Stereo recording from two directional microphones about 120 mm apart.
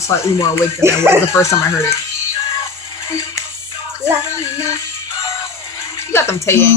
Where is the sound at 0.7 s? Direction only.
20° right (ahead or behind).